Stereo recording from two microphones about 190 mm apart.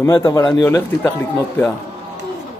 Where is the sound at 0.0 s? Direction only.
15° left (ahead or behind).